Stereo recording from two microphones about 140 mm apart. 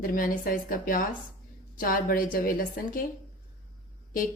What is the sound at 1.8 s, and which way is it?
A woman's voice, 90° left.